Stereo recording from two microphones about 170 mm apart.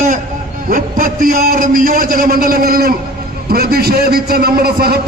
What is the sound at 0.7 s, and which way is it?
A man's voice, 55° right (ahead or behind).